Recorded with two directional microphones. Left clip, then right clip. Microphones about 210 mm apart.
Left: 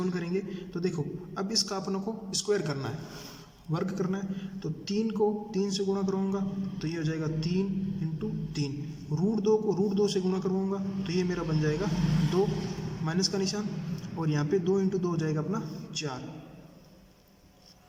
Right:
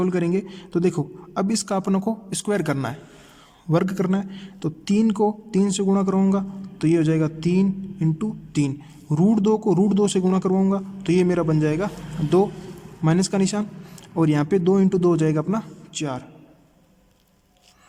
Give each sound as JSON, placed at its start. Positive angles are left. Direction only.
{"t": 0.0, "sound": "a man's voice", "side_deg": -55}
{"t": 13.1, "sound": "a man's voice", "side_deg": -60}